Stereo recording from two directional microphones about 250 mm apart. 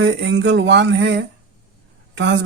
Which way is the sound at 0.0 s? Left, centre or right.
Right.